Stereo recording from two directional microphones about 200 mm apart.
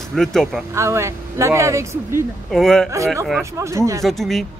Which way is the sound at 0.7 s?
15° right (ahead or behind).